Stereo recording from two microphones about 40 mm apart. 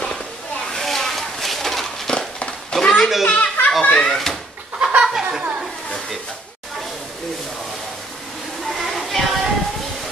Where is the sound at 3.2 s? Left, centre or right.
Left.